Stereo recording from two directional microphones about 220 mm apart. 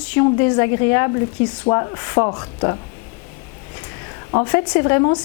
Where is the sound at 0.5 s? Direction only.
20° left (ahead or behind).